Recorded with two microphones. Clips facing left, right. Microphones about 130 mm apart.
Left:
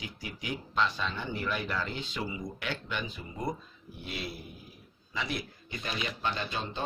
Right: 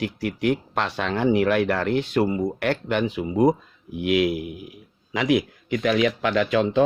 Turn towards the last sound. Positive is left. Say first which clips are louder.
# right 15 dB
turn(degrees=-90)